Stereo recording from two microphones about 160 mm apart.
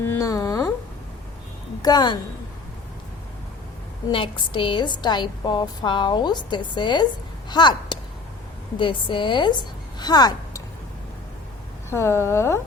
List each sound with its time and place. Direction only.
0.0 s music: 15° left (ahead or behind)
1.8 s a woman's voice: 25° left (ahead or behind)
4.1 s a woman's voice: 30° left (ahead or behind)
11.9 s speech: 15° left (ahead or behind)